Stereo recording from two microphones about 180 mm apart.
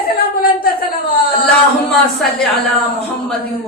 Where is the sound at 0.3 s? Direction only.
55° left (ahead or behind).